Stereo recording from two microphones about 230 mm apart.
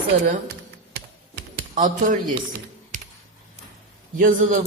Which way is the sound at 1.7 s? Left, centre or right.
Right.